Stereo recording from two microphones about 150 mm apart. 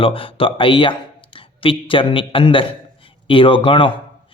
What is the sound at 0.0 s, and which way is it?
A man's voice, 35° left (ahead or behind).